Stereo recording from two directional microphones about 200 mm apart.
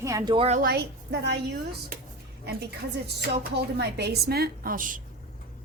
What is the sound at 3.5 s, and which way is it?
Speech, 55° right (ahead or behind).